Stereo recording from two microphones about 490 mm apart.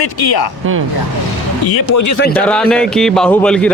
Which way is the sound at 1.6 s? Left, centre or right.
Left.